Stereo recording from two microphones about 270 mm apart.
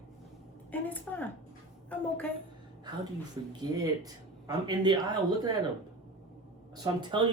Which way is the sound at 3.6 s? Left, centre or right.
Centre.